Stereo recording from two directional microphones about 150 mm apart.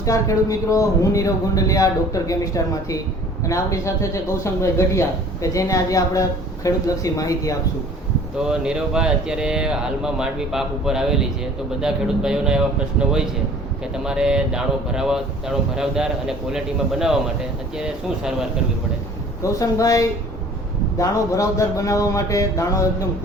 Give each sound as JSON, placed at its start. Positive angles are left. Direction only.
{"t": 0.0, "sound": "a man's voice", "side_deg": 20}
{"t": 8.4, "sound": "speech", "side_deg": -5}
{"t": 19.4, "sound": "a man's voice", "side_deg": 20}